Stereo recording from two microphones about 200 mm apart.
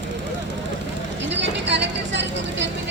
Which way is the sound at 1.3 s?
60° right (ahead or behind).